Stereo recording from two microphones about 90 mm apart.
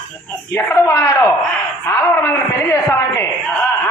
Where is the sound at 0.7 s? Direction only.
35° left (ahead or behind).